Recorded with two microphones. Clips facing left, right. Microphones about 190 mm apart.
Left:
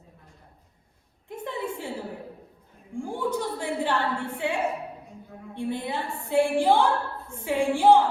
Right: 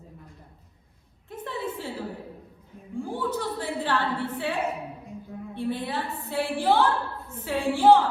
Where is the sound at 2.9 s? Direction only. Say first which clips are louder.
Left 1 dB; 15° left (ahead or behind).